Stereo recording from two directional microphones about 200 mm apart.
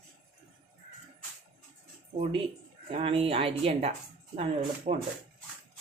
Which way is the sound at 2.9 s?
30° right (ahead or behind).